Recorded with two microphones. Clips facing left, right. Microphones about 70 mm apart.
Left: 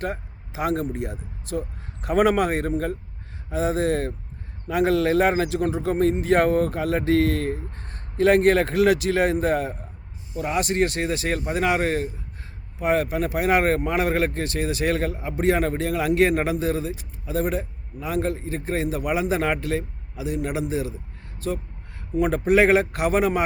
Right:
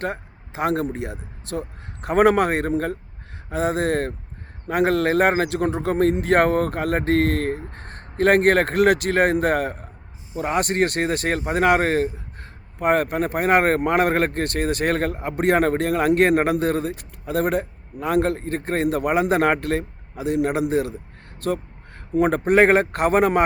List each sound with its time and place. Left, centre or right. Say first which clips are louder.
0.0 s a man's voice: right 2 dB; right
10.3 s a man's voice: right 2 dB; right
22.1 s a man's voice: right 2 dB; right